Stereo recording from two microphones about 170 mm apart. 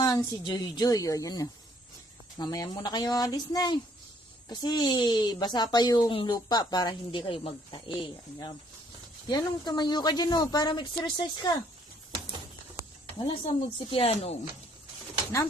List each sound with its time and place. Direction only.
0.0 s speech: 20° left (ahead or behind)
13.1 s speech: 30° left (ahead or behind)